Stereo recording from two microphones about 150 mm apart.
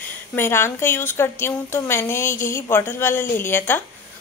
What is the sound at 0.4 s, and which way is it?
A woman's voice, 15° left (ahead or behind).